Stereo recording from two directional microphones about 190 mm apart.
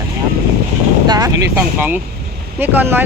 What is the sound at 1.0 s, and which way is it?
Speech, 20° right (ahead or behind).